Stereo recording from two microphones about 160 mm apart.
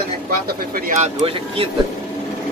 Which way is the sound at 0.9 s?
35° right (ahead or behind).